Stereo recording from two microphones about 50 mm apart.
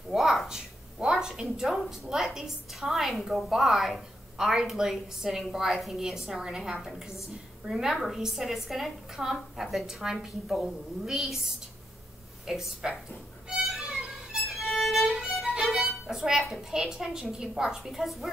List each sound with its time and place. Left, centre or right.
0.1 s a woman's voice: centre
6.8 s a woman's voice: centre
12.4 s a woman's voice: centre
13.6 s violin: centre
15.4 s music: centre
15.8 s music: centre
16.7 s a woman's voice: centre